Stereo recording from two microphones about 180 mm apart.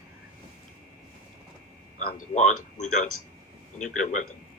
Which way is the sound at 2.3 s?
40° left (ahead or behind).